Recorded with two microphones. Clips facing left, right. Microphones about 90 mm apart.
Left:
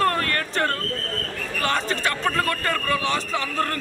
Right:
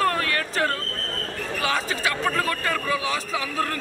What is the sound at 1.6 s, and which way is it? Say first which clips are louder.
Speech: left 2 dB; 5° right (ahead or behind).